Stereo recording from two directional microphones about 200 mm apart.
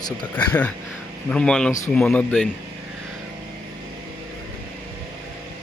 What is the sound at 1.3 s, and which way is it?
A man's voice, 5° left (ahead or behind).